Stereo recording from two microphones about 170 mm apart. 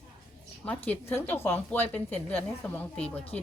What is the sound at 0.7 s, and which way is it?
Speech, 10° left (ahead or behind).